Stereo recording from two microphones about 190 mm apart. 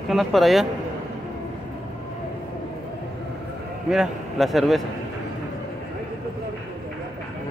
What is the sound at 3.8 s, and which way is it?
Speech, centre (ahead or behind).